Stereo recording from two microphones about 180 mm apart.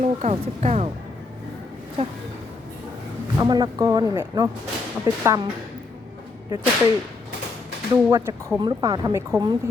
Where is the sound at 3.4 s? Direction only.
20° right (ahead or behind).